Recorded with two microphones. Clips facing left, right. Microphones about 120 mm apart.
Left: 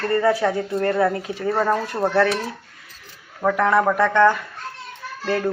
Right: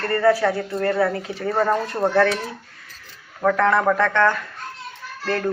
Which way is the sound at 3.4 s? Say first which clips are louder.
Even; 10° left (ahead or behind).